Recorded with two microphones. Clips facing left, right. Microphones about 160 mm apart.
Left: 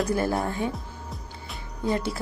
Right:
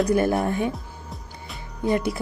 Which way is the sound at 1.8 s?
15° right (ahead or behind).